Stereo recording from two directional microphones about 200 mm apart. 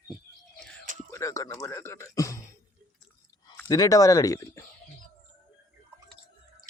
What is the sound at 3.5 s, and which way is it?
Speech, 15° left (ahead or behind).